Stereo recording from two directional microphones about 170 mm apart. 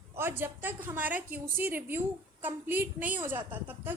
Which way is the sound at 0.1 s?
15° right (ahead or behind).